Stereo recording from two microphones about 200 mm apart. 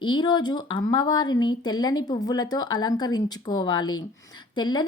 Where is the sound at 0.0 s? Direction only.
20° left (ahead or behind).